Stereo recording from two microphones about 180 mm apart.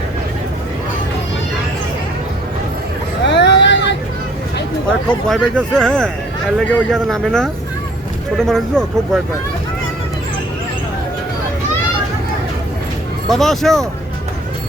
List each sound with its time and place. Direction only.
3.2 s vehicle: 75° left (ahead or behind)
4.9 s speech: 5° left (ahead or behind)
13.2 s speech: centre (ahead or behind)